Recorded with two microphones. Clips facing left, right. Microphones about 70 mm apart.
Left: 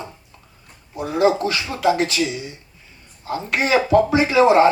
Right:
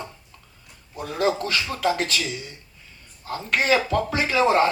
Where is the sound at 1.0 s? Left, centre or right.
Left.